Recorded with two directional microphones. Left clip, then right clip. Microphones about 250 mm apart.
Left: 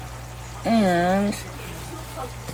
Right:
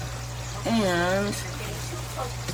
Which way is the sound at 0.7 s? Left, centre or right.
Left.